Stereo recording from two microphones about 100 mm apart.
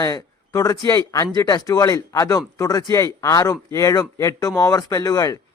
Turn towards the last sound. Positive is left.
turn(degrees=40)  # may be behind; listen again after turning